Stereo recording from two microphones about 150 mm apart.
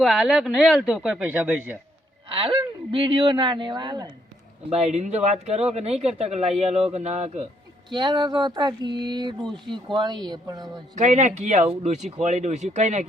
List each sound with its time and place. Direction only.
0.0 s speech: centre (ahead or behind)
2.3 s speech: 35° right (ahead or behind)
4.7 s speech: 45° right (ahead or behind)
7.9 s a sound: 30° right (ahead or behind)
9.4 s speech: 5° left (ahead or behind)
9.7 s a sound: 30° right (ahead or behind)
10.9 s speech: 55° right (ahead or behind)